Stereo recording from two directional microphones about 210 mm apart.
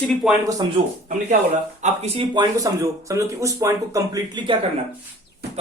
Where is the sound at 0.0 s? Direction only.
5° left (ahead or behind).